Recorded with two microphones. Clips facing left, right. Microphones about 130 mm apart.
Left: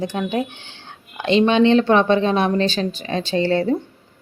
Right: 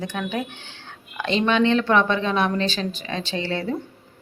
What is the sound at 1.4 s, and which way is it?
Speech, 25° left (ahead or behind).